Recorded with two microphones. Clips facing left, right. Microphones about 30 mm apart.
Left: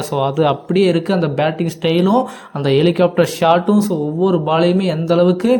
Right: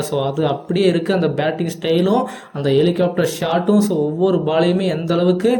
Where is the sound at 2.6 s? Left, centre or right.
Left.